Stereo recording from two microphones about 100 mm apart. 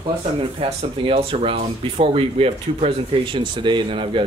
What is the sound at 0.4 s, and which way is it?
Speech, 65° right (ahead or behind).